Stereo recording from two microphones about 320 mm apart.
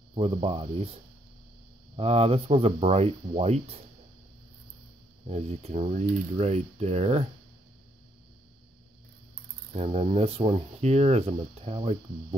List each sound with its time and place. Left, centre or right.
0.1 s speech: centre
2.0 s speech: centre
5.2 s speech: centre
9.7 s speech: centre